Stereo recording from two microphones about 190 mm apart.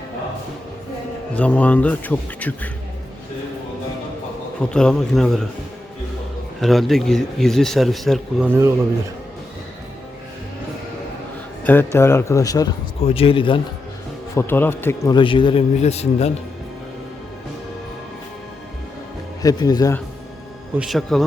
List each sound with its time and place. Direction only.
1.4 s a man's voice: 10° left (ahead or behind)
4.6 s speech: 5° left (ahead or behind)
6.6 s speech: centre (ahead or behind)
11.6 s a man's voice: 10° left (ahead or behind)
13.1 s speech: 30° left (ahead or behind)
14.3 s a man's voice: 10° left (ahead or behind)
15.1 s speech: 25° left (ahead or behind)
19.4 s speech: 20° left (ahead or behind)
20.7 s speech: centre (ahead or behind)